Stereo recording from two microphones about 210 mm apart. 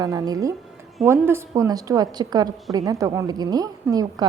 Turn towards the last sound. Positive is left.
turn(degrees=-15)  # may be behind; listen again after turning